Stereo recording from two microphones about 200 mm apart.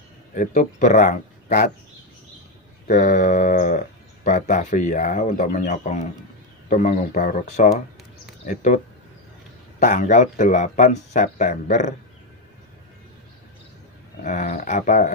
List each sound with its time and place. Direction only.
0.3 s speech: 40° left (ahead or behind)
2.9 s speech: 35° left (ahead or behind)
14.2 s speech: 35° left (ahead or behind)